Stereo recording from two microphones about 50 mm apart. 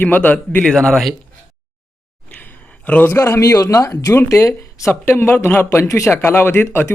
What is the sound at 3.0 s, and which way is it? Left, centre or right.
Speech, left.